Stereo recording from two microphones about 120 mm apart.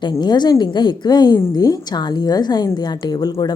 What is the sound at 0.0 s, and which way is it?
Speech, 35° left (ahead or behind).